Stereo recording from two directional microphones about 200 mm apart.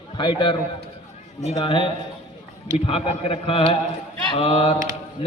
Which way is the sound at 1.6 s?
25° left (ahead or behind).